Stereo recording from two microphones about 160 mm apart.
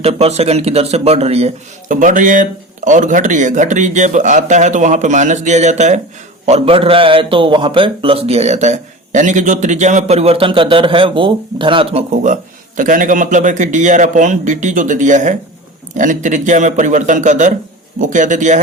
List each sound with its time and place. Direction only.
0.0 s a man's voice: 40° right (ahead or behind)
12.1 s speech: 50° right (ahead or behind)